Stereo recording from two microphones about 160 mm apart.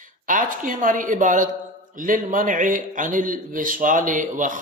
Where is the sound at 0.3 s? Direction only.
55° right (ahead or behind).